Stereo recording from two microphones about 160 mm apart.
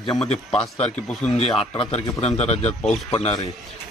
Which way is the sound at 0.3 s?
40° left (ahead or behind).